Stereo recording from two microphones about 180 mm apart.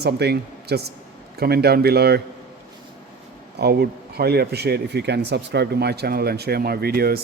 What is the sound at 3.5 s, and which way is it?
Speech, 65° right (ahead or behind).